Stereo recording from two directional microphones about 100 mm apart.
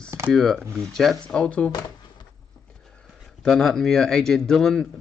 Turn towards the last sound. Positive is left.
turn(degrees=5)  # may be behind; listen again after turning